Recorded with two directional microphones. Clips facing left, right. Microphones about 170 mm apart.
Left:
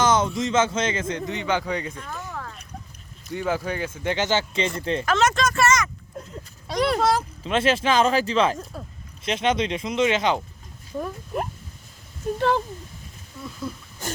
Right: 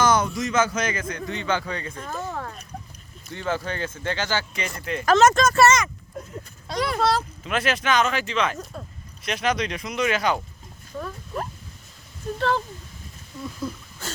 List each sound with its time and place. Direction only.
0.0 s speech: 20° left (ahead or behind)
2.0 s a sound: 40° right (ahead or behind)
3.3 s speech: 10° left (ahead or behind); by 5.0 s 25° left (ahead or behind)
5.0 s speech: 40° right (ahead or behind)
5.6 s vehicle: 25° right (ahead or behind)
7.0 s speech: 15° left (ahead or behind)
7.4 s speech: 30° left (ahead or behind)
8.7 s speech: 5° left (ahead or behind)
9.2 s speech: 25° left (ahead or behind)